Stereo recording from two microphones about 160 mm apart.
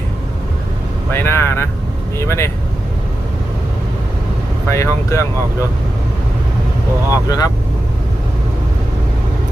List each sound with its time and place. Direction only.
1.1 s speech: 15° left (ahead or behind)
4.7 s speech: 20° left (ahead or behind)
7.1 s speech: 25° left (ahead or behind)